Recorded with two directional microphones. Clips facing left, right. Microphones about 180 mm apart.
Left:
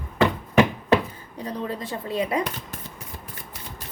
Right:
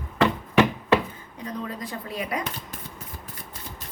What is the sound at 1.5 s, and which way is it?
Speech, 30° left (ahead or behind).